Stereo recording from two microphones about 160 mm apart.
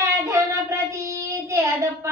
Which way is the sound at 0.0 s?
20° right (ahead or behind).